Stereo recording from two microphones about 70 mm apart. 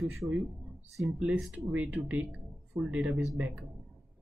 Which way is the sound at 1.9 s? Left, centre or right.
Right.